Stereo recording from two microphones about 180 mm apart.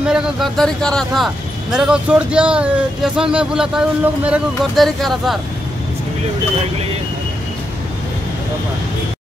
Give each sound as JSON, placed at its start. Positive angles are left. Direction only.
{"t": 0.0, "sound": "speech", "side_deg": 0}